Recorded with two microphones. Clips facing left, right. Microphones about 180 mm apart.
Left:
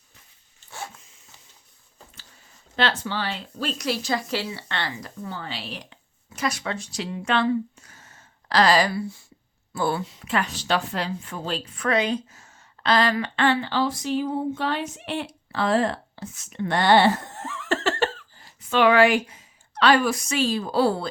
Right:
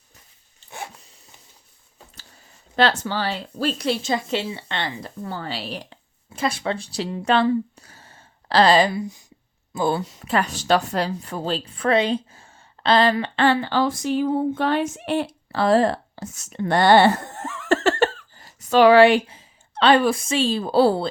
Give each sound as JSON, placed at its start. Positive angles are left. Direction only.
{"t": 2.7, "sound": "speech", "side_deg": -40}
{"t": 10.0, "sound": "speech", "side_deg": -40}
{"t": 17.3, "sound": "a sound", "side_deg": -50}